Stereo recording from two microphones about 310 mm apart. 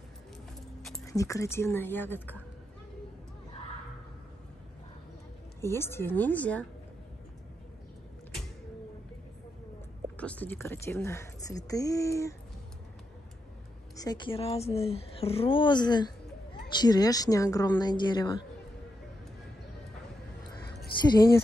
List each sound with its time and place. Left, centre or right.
0.8 s speech: centre
5.6 s speech: centre
10.1 s speech: centre
13.9 s speech: centre
21.0 s speech: centre